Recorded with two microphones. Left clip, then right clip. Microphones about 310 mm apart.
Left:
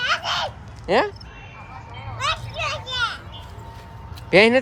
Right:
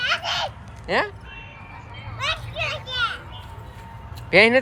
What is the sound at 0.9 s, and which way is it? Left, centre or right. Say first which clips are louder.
Speech: left 3 dB; centre.